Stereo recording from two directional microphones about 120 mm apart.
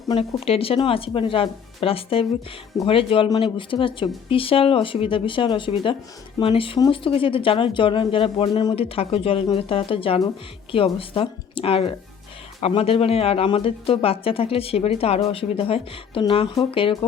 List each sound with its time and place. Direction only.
0.2 s speech: 55° left (ahead or behind)